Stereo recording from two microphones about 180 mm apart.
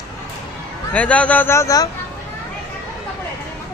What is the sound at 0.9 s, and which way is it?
A man's voice, 10° left (ahead or behind).